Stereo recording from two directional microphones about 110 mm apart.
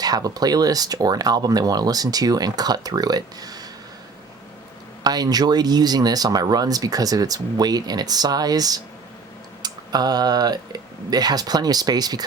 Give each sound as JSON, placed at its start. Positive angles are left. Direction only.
{"t": 0.0, "sound": "speech", "side_deg": -35}
{"t": 5.0, "sound": "speech", "side_deg": -35}